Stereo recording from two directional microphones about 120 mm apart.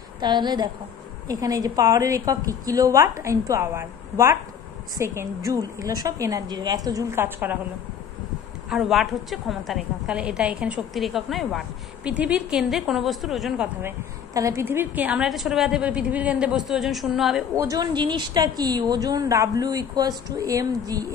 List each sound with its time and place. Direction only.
0.2 s a woman's voice: 40° right (ahead or behind); by 7.5 s 15° right (ahead or behind)
8.6 s a woman's voice: 5° right (ahead or behind)
13.8 s a woman's voice: 25° right (ahead or behind)
15.2 s a woman's voice: centre (ahead or behind)
17.7 s a woman's voice: 40° right (ahead or behind)